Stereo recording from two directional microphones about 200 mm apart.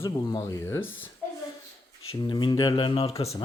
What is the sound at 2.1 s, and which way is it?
Speech, 20° left (ahead or behind).